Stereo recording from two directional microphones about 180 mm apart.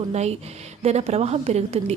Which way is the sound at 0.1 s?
35° right (ahead or behind).